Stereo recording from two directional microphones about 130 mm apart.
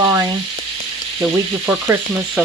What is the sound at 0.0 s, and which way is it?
Frying, 25° right (ahead or behind).